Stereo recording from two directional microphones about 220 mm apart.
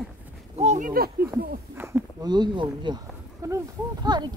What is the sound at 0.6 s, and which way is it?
Speech, 35° right (ahead or behind).